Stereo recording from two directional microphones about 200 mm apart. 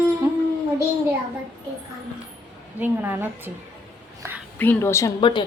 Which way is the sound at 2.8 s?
10° right (ahead or behind).